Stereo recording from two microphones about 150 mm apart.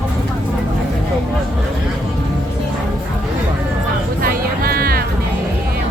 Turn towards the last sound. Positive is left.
turn(degrees=-80)